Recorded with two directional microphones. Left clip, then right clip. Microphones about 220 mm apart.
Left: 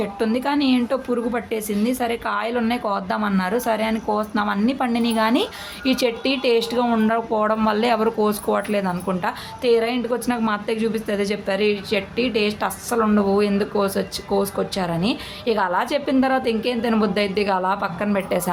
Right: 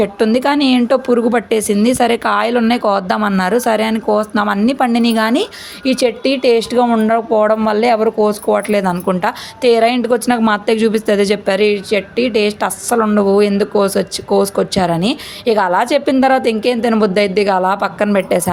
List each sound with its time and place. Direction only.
0.0 s a woman's voice: 30° right (ahead or behind)